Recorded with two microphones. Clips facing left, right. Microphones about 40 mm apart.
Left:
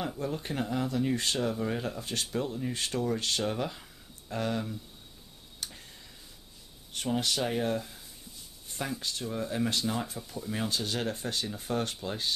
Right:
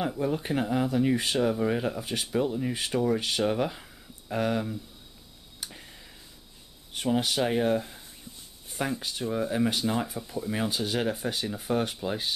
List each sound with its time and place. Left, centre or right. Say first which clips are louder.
0.0 s speech: right 5 dB; centre
5.6 s tick: right 1 dB; centre
6.9 s speech: right 4 dB; centre